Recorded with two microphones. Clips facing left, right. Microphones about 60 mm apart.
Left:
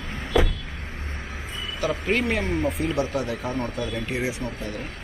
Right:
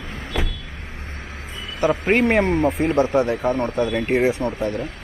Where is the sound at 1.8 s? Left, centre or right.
Right.